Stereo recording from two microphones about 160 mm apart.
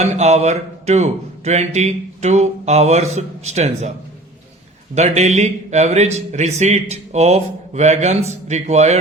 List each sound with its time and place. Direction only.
0.0 s a man's voice: 45° right (ahead or behind)
4.9 s a man's voice: 45° right (ahead or behind)